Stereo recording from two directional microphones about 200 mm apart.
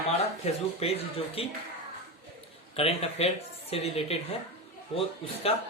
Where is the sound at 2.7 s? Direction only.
30° left (ahead or behind).